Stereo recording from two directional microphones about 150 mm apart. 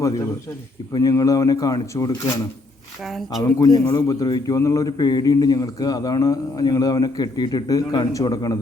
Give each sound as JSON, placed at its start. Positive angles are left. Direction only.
{"t": 0.9, "sound": "a man's voice", "side_deg": 25}
{"t": 3.8, "sound": "a man's voice", "side_deg": 25}